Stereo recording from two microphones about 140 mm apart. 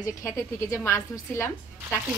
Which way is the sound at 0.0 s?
20° left (ahead or behind).